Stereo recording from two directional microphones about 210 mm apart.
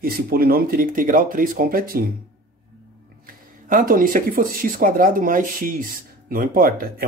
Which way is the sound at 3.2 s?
40° right (ahead or behind).